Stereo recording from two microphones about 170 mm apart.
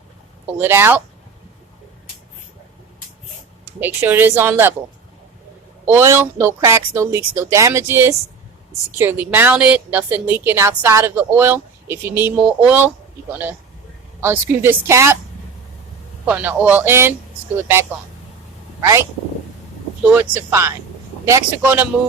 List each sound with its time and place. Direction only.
0.6 s a woman's voice: 15° right (ahead or behind)
3.8 s a woman's voice: 10° right (ahead or behind)
5.9 s a woman's voice: 15° right (ahead or behind)
16.2 s a woman's voice: 10° right (ahead or behind)
18.8 s speech: 15° right (ahead or behind)
20.1 s a woman's voice: 15° right (ahead or behind)